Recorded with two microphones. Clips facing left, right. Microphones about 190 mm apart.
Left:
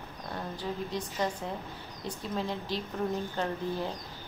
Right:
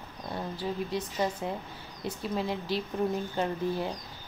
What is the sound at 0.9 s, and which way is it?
A woman's voice, 5° right (ahead or behind).